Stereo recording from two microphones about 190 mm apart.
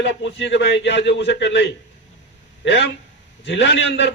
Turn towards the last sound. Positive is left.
turn(degrees=70)  # may be behind; listen again after turning